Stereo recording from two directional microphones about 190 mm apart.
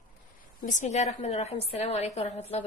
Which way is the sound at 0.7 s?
40° left (ahead or behind).